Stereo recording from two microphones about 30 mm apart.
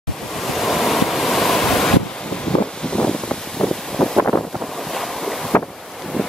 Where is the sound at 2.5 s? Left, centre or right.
Left.